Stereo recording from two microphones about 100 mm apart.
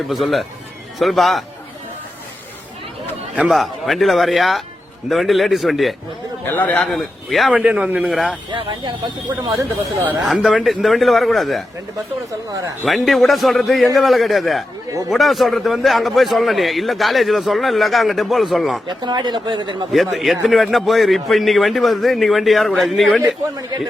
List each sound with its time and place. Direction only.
0.1 s a man's voice: centre (ahead or behind)
3.3 s a man's voice: 5° right (ahead or behind)
6.4 s a man's voice: 20° left (ahead or behind)
6.7 s a man's voice: centre (ahead or behind)
7.5 s a man's voice: 10° right (ahead or behind)
8.1 s a man's voice: centre (ahead or behind)
8.5 s speech: 55° right (ahead or behind)
10.2 s a man's voice: centre (ahead or behind)
12.8 s a man's voice: centre (ahead or behind)
19.0 s speech: 45° right (ahead or behind)
19.9 s a man's voice: centre (ahead or behind)